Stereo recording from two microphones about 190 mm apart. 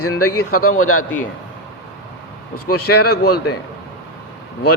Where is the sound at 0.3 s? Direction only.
90° left.